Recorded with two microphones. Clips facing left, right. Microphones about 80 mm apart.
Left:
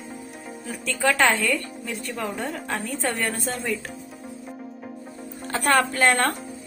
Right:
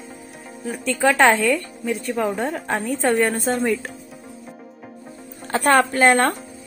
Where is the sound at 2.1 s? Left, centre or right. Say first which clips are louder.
Right 6 dB; right.